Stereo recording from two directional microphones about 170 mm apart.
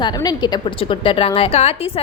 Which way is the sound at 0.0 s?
25° left (ahead or behind).